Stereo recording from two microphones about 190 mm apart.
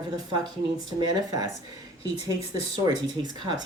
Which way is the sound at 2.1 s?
30° left (ahead or behind).